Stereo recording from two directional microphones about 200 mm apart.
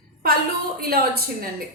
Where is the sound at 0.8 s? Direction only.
50° right (ahead or behind).